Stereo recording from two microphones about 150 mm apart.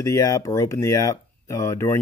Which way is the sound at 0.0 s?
20° left (ahead or behind).